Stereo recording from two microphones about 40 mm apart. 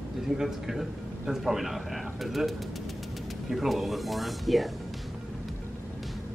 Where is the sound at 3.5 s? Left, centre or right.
Centre.